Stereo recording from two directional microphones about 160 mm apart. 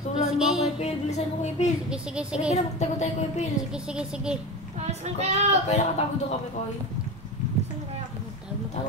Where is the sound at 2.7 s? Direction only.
45° left (ahead or behind).